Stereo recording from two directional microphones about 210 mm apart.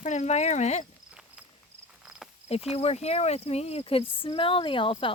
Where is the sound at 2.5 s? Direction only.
30° left (ahead or behind).